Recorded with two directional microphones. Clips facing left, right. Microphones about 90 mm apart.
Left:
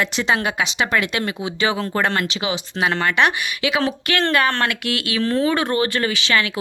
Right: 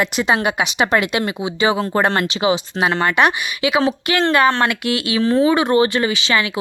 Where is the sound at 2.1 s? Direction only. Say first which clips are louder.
Right 5 dB; 30° right (ahead or behind).